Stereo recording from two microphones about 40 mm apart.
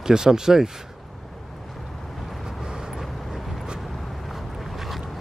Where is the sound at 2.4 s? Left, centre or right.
Centre.